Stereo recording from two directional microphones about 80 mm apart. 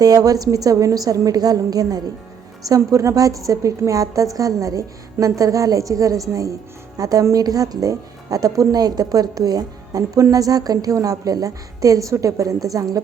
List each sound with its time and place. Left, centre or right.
0.0 s a woman's voice: right